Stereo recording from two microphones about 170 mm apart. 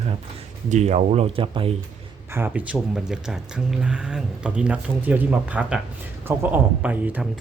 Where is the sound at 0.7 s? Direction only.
40° right (ahead or behind).